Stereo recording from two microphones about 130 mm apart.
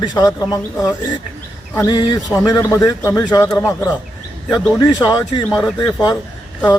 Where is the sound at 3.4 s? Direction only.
15° left (ahead or behind).